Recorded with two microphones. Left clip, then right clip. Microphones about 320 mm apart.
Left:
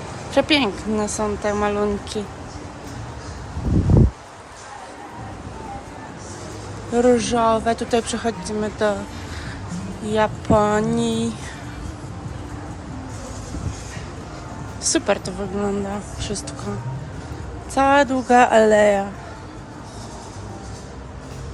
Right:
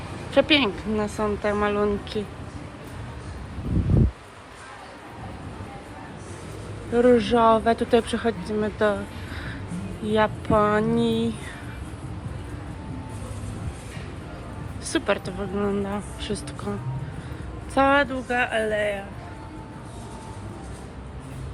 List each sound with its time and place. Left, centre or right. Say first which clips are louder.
0.3 s speech: left 1 dB; centre
6.9 s speech: left 1 dB; centre
10.1 s speech: left 3 dB; centre
14.8 s speech: left 4 dB; centre
17.7 s speech: left 4 dB; centre